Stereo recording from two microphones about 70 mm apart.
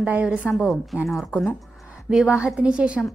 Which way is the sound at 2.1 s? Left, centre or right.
Centre.